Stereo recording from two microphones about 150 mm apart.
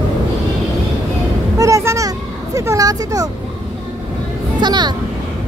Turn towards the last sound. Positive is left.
turn(degrees=-30)  # may be behind; listen again after turning